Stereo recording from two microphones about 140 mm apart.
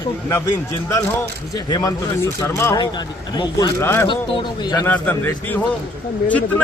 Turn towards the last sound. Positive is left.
turn(degrees=10)  # may be behind; listen again after turning